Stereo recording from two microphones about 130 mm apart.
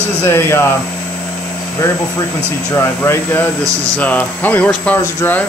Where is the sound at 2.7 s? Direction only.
20° left (ahead or behind).